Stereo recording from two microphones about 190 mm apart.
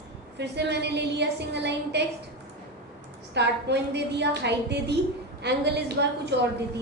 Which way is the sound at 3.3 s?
60° right (ahead or behind).